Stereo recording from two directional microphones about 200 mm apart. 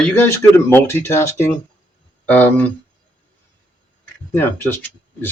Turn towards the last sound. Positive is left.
turn(degrees=10)  # may be behind; listen again after turning